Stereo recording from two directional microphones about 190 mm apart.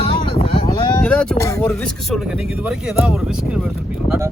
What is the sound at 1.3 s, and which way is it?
Speech, 15° left (ahead or behind).